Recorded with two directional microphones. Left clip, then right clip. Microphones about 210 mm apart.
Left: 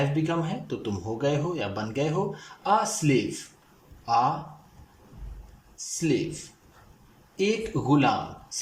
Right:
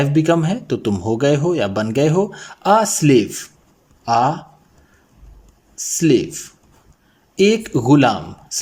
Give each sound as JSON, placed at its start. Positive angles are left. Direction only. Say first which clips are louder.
{"t": 0.1, "sound": "speech", "louder": "right 12 dB", "side_deg": -40}
{"t": 5.7, "sound": "speech", "louder": "right 12 dB", "side_deg": -45}